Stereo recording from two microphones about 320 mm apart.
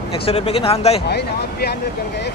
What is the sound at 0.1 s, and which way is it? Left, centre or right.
Speech, centre.